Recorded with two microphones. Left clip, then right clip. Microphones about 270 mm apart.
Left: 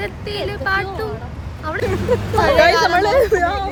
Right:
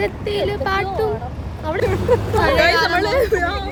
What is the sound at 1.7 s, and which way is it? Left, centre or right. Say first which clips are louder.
Speech: right 2 dB; centre.